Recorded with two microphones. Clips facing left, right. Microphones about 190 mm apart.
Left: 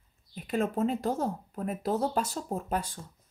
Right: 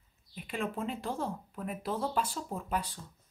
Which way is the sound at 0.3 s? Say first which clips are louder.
Left 6 dB; 40° left (ahead or behind).